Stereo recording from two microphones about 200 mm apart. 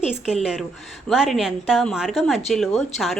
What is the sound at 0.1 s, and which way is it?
Speech, 5° right (ahead or behind).